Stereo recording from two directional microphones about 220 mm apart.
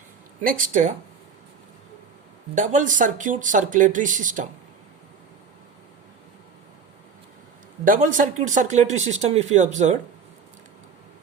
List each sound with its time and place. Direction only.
0.4 s speech: 35° right (ahead or behind)
2.6 s speech: 35° right (ahead or behind)
7.9 s speech: 35° right (ahead or behind)